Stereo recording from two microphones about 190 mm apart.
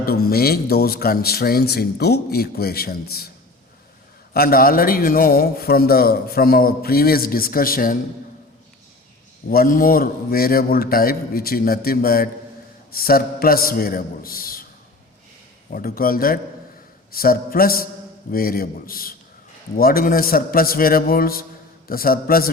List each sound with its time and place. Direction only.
0.3 s speech: 55° left (ahead or behind)
4.4 s a man's voice: 50° left (ahead or behind)
9.5 s a man's voice: 50° left (ahead or behind)
15.7 s a man's voice: 50° left (ahead or behind)